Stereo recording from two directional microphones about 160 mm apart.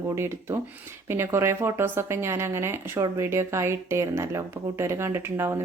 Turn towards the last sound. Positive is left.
turn(degrees=-15)  # may be behind; listen again after turning